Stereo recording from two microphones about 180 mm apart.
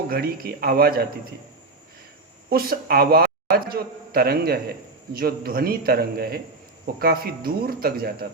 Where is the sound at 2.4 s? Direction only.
55° right (ahead or behind).